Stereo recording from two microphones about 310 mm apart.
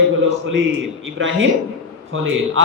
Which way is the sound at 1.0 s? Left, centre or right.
Right.